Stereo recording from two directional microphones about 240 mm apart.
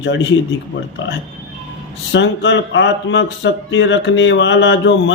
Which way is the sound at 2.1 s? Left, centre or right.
Left.